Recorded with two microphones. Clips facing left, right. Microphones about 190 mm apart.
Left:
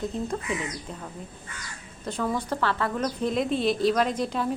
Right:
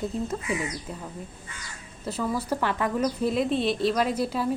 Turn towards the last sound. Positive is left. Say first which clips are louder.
# even
turn(degrees=-5)  # may be behind; listen again after turning